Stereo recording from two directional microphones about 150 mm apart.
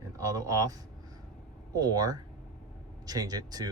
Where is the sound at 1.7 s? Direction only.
25° right (ahead or behind).